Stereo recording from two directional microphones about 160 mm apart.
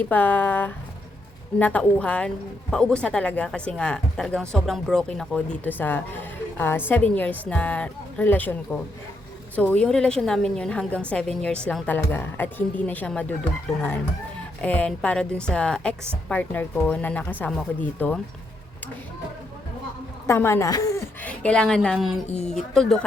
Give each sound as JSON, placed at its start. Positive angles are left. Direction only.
{"t": 0.1, "sound": "a woman's voice", "side_deg": 10}
{"t": 14.6, "sound": "speech", "side_deg": 10}
{"t": 20.2, "sound": "a woman's voice", "side_deg": 15}
{"t": 21.2, "sound": "a woman's voice", "side_deg": 10}